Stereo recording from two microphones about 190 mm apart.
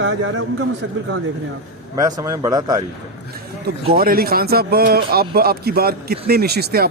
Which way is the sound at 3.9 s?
50° right (ahead or behind).